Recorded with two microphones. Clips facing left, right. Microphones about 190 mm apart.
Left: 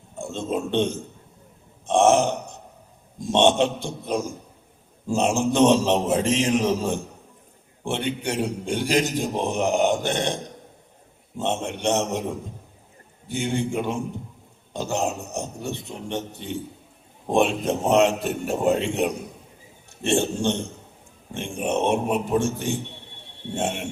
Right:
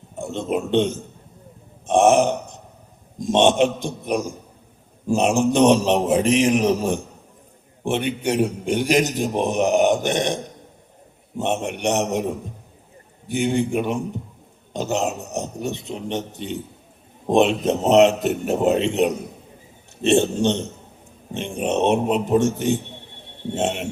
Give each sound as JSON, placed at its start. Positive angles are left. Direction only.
{"t": 0.2, "sound": "a man's voice", "side_deg": -15}
{"t": 1.9, "sound": "burping", "side_deg": -15}
{"t": 3.2, "sound": "a man's voice", "side_deg": -15}
{"t": 11.3, "sound": "a man's voice", "side_deg": -15}